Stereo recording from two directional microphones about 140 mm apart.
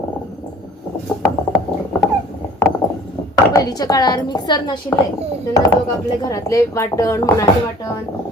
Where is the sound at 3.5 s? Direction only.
25° left (ahead or behind).